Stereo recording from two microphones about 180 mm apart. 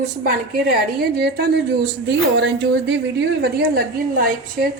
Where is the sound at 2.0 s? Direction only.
75° right (ahead or behind).